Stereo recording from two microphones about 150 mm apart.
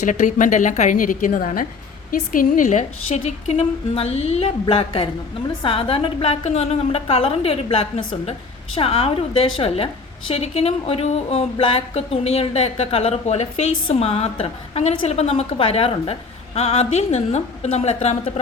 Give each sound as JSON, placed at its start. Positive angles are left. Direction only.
{"t": 0.0, "sound": "a woman's voice", "side_deg": 55}
{"t": 3.2, "sound": "a woman's voice", "side_deg": 45}